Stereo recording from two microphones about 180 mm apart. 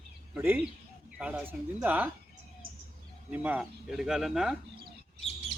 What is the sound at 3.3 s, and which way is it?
Speech, 10° right (ahead or behind).